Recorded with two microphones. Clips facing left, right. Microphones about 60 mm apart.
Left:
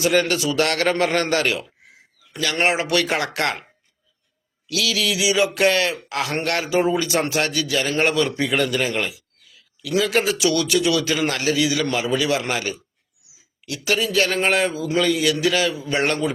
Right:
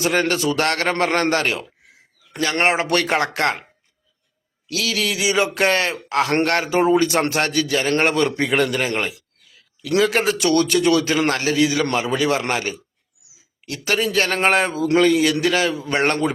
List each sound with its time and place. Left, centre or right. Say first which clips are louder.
0.0 s a man's voice: even; right
4.7 s a man's voice: even; right
9.0 s a sound: right 1 dB; right
10.1 s a man's voice: right 1 dB; right
13.7 s a man's voice: right 1 dB; right